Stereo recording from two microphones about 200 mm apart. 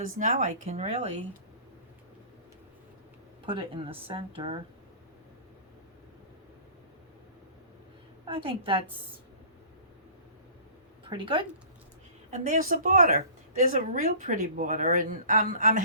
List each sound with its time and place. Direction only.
0.2 s speech: 40° right (ahead or behind)
3.4 s a woman's voice: 25° right (ahead or behind)
8.2 s a woman's voice: 25° right (ahead or behind)
11.1 s a woman's voice: 25° right (ahead or behind)
12.3 s speech: 40° right (ahead or behind)